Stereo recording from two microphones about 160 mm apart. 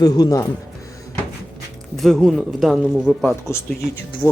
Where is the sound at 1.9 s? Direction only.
Centre (ahead or behind).